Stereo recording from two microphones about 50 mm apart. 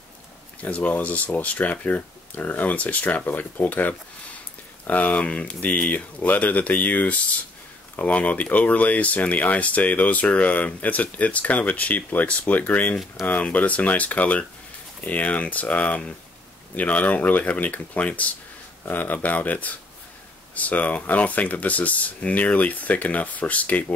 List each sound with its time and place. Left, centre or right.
0.6 s speech: left